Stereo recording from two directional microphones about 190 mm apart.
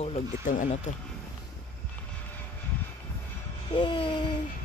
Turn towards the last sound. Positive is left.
turn(degrees=25)  # may be behind; listen again after turning